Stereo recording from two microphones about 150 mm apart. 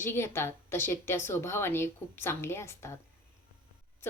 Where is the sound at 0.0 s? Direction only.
15° left (ahead or behind).